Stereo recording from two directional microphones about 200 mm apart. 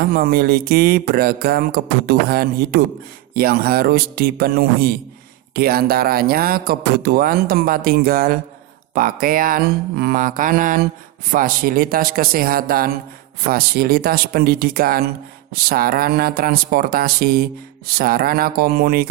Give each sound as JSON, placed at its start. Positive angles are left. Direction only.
{"t": 0.0, "sound": "speech", "side_deg": -50}